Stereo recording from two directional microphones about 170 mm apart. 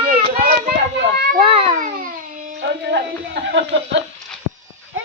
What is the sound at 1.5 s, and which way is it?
Cat, 35° right (ahead or behind).